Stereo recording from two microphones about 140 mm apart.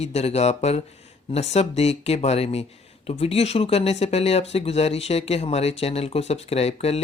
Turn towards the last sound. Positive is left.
turn(degrees=50)  # may be behind; listen again after turning